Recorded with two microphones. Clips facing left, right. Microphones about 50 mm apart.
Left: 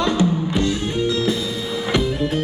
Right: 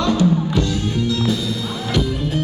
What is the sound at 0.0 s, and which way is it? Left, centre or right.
Music, left.